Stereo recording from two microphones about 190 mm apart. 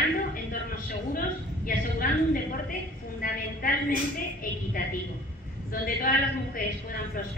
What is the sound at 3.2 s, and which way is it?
Speech, 50° left (ahead or behind).